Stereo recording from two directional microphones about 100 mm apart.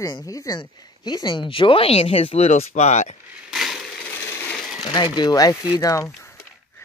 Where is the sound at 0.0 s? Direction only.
35° left (ahead or behind); by 3.2 s 90° left.